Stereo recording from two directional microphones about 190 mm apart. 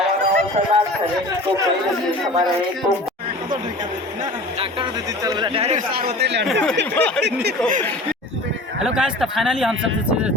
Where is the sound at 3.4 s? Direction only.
25° right (ahead or behind).